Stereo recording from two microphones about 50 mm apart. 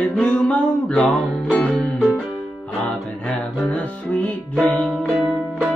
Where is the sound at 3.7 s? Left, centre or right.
Left.